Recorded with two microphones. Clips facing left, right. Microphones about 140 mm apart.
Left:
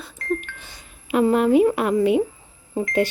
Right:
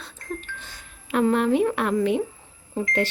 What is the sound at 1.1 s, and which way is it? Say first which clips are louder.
Speech: left 4 dB; 5° left (ahead or behind).